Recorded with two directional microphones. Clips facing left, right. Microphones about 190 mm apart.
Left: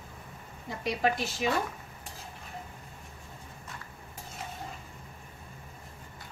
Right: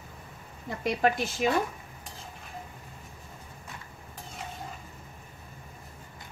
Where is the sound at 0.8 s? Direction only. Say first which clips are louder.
Right 3 dB; 50° right (ahead or behind).